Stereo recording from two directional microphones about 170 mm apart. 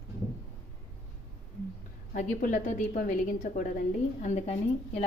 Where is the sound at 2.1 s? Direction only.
50° left (ahead or behind).